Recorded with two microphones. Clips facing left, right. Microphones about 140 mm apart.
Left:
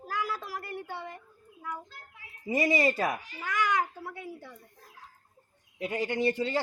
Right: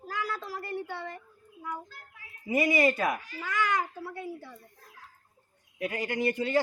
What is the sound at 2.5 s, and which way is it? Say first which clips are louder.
Speech: right 1 dB; 30° left (ahead or behind).